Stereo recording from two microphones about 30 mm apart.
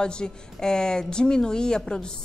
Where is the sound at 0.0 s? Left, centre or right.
Left.